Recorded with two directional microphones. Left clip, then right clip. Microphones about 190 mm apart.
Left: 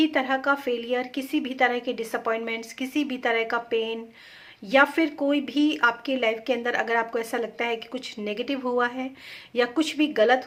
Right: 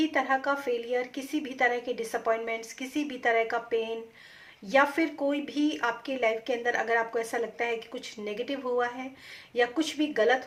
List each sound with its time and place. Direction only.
0.0 s speech: 35° left (ahead or behind)